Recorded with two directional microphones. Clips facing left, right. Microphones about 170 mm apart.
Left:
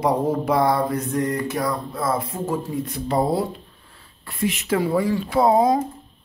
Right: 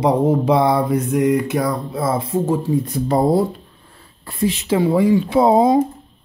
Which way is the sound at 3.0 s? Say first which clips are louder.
Right 4 dB; 40° right (ahead or behind).